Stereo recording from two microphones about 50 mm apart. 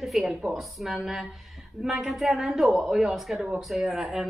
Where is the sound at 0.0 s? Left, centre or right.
Centre.